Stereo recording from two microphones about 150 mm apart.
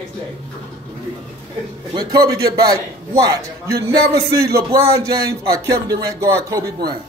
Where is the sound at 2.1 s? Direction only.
25° right (ahead or behind).